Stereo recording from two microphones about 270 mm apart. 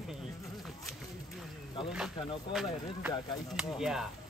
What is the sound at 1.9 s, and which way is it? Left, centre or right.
Speech, centre.